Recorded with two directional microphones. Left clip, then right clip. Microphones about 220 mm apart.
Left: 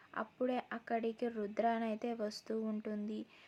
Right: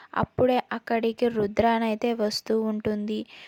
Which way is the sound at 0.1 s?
40° right (ahead or behind).